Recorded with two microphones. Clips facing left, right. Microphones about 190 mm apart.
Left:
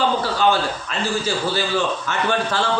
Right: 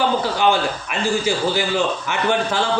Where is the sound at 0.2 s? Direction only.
15° right (ahead or behind).